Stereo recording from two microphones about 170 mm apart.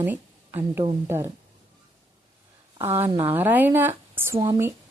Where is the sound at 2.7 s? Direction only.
15° right (ahead or behind).